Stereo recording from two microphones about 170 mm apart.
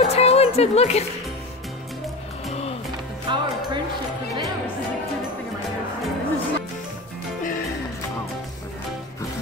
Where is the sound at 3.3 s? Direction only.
30° right (ahead or behind).